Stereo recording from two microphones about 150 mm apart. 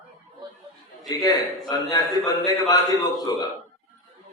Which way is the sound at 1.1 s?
25° left (ahead or behind).